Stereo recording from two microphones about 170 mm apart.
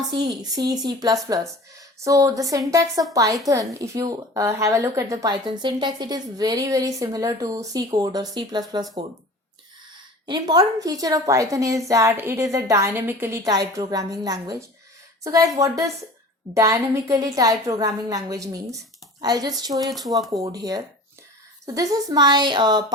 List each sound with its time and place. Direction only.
0.1 s a woman's voice: 25° right (ahead or behind)
10.2 s a woman's voice: 25° right (ahead or behind)
19.9 s speech: centre (ahead or behind)
20.3 s a woman's voice: 20° right (ahead or behind)